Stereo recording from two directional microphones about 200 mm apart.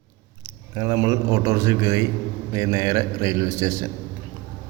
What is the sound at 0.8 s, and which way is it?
A man's voice, 20° right (ahead or behind).